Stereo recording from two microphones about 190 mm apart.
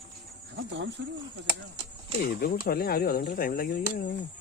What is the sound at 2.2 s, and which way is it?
Speech, 50° left (ahead or behind).